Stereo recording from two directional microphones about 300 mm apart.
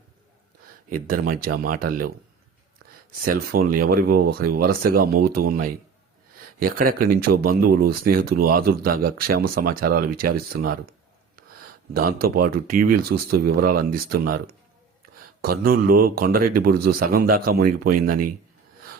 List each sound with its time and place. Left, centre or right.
1.0 s speech: right
3.2 s speech: right
6.3 s a sound: right
7.1 s speech: right